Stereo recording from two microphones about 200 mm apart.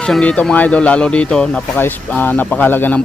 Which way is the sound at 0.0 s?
5° left (ahead or behind).